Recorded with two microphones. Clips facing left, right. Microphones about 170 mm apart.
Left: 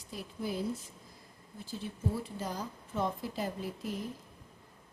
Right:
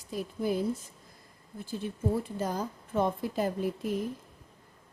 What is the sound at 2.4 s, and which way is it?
A woman's voice, 50° right (ahead or behind).